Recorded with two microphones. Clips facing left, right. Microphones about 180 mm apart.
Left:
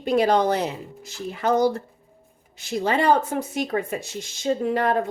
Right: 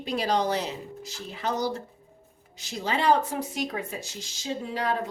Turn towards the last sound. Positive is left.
turn(degrees=50)  # may be behind; listen again after turning